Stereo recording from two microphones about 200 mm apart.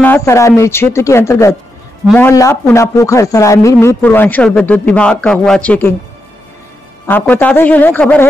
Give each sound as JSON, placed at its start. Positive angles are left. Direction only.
{"t": 0.0, "sound": "speech", "side_deg": 10}
{"t": 7.1, "sound": "speech", "side_deg": 10}